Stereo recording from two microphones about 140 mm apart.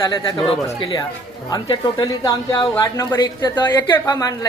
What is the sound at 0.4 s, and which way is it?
A woman's voice, 35° left (ahead or behind).